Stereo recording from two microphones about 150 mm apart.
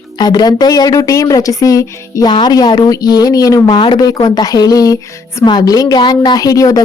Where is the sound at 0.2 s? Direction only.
25° left (ahead or behind).